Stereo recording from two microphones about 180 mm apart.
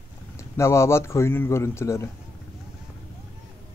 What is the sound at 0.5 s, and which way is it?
Speech, 15° left (ahead or behind).